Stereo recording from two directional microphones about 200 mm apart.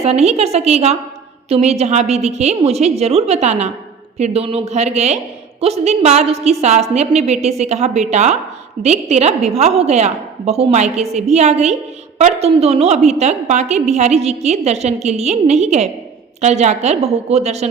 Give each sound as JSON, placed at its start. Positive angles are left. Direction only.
{"t": 0.0, "sound": "a woman's voice", "side_deg": -30}